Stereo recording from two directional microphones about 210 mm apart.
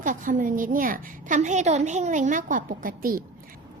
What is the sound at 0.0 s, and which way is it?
A woman's voice, 40° right (ahead or behind).